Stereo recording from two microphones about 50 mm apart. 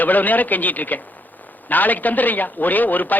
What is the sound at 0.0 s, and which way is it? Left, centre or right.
A man's voice, left.